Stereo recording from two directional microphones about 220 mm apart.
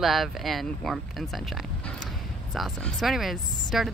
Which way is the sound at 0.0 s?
Centre (ahead or behind).